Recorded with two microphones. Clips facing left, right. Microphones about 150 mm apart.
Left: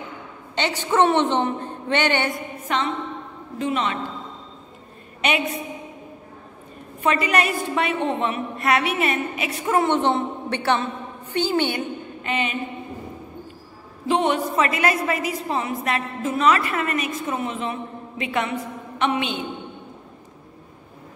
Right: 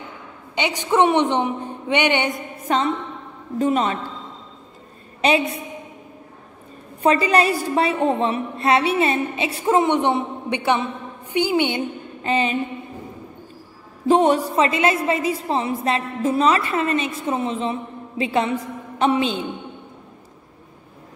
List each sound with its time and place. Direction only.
0.6 s a woman's voice: 10° right (ahead or behind)
2.7 s a woman's voice: 35° right (ahead or behind)
5.2 s a woman's voice: 30° right (ahead or behind)
7.0 s a woman's voice: 35° right (ahead or behind)
9.8 s a woman's voice: 15° right (ahead or behind)
12.2 s a sound: 35° right (ahead or behind)
14.0 s a woman's voice: 40° right (ahead or behind)